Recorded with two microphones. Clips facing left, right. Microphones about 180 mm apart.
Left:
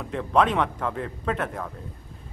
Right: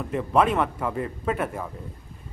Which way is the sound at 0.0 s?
5° right (ahead or behind).